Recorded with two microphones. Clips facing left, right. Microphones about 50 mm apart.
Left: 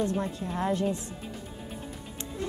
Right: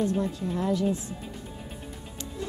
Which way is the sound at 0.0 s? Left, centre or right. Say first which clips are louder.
Right 2 dB; left.